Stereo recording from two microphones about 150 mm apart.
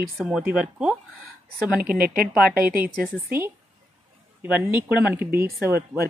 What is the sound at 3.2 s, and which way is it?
Speech, 15° right (ahead or behind).